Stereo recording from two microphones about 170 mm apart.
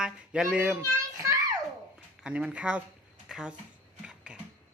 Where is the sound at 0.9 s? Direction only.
20° right (ahead or behind).